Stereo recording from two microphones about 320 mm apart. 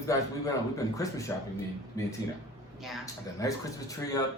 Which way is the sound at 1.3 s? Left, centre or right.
Centre.